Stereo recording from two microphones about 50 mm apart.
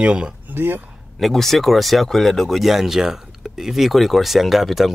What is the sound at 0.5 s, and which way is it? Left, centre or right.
Speech, right.